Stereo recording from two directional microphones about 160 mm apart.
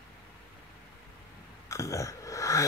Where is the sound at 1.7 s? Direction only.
20° left (ahead or behind).